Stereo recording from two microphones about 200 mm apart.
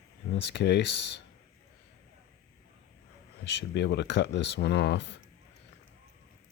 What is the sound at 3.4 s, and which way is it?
Speech, 60° left (ahead or behind).